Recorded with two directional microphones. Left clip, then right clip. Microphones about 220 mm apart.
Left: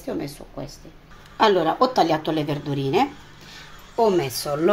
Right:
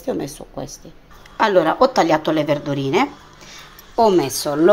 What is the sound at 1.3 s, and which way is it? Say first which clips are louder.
A woman's voice: right 3 dB; 15° right (ahead or behind).